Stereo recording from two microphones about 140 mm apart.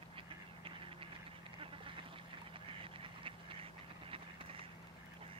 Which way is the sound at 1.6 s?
40° right (ahead or behind).